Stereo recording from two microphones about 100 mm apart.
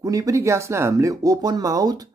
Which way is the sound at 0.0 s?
35° right (ahead or behind).